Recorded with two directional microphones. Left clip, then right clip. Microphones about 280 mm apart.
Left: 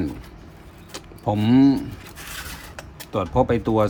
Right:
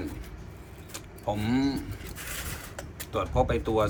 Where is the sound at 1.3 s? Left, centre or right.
Left.